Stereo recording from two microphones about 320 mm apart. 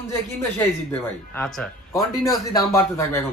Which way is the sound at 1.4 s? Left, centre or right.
Centre.